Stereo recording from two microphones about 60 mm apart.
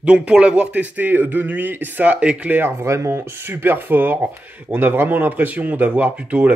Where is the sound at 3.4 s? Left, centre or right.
Right.